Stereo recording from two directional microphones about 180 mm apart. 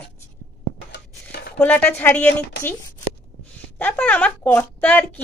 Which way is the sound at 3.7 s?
10° left (ahead or behind).